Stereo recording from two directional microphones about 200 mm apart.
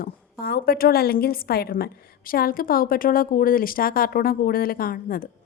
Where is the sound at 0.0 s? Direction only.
50° left (ahead or behind).